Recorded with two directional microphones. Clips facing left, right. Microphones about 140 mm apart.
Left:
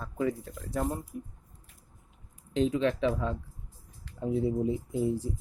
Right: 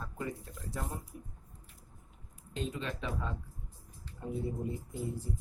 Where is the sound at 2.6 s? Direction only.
90° left.